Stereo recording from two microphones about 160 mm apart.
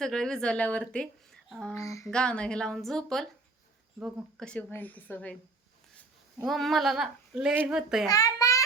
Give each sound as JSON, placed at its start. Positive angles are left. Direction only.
{"t": 0.0, "sound": "a woman's voice", "side_deg": 5}
{"t": 1.7, "sound": "a sound", "side_deg": 20}
{"t": 2.0, "sound": "a woman's voice", "side_deg": 5}
{"t": 6.4, "sound": "a woman's voice", "side_deg": 0}
{"t": 8.0, "sound": "a child's voice", "side_deg": 25}